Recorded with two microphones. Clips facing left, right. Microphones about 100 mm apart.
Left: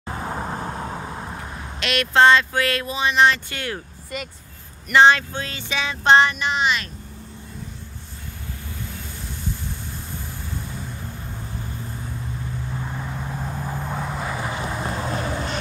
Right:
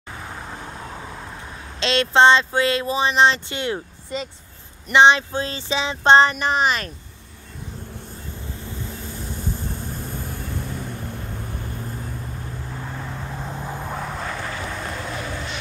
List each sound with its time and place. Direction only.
0.1 s vehicle: 35° left (ahead or behind)
1.8 s speech: 25° right (ahead or behind)
5.3 s a sound: 30° right (ahead or behind)
12.8 s vehicle: 5° left (ahead or behind); by 15.5 s 35° left (ahead or behind)